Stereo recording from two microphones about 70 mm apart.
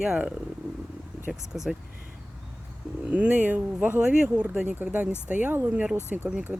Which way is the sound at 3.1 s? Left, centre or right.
Right.